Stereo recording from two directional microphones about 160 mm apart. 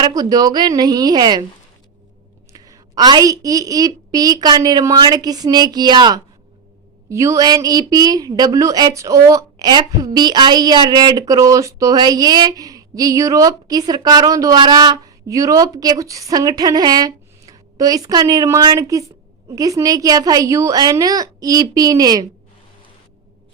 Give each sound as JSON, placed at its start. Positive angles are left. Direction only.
{"t": 0.0, "sound": "speech", "side_deg": -25}
{"t": 2.5, "sound": "speech", "side_deg": -20}